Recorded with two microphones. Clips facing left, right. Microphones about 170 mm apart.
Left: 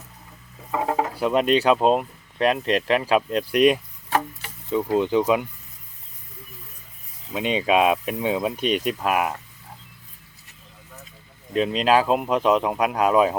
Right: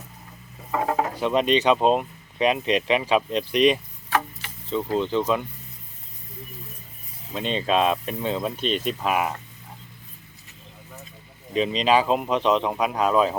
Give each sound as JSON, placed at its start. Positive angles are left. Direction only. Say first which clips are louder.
{"t": 0.7, "sound": "speech", "louder": "even", "side_deg": 10}
{"t": 4.1, "sound": "a sound", "louder": "left 1 dB", "side_deg": 40}
{"t": 4.7, "sound": "speech", "louder": "left 3 dB", "side_deg": 15}
{"t": 7.3, "sound": "speech", "louder": "left 3 dB", "side_deg": 10}
{"t": 11.5, "sound": "speech", "louder": "left 1 dB", "side_deg": 5}